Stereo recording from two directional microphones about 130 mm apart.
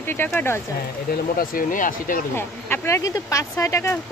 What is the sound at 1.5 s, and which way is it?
Speech, 90° left.